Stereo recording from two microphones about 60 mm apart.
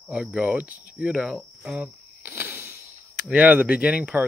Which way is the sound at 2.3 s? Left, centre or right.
Right.